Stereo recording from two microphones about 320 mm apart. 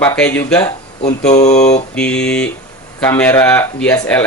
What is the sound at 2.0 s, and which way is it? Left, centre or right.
A man's voice, centre.